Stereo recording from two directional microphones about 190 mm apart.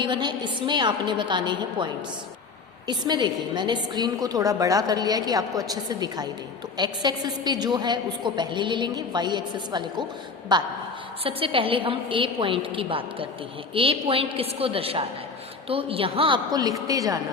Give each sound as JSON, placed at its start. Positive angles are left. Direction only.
{"t": 0.0, "sound": "a woman's voice", "side_deg": -25}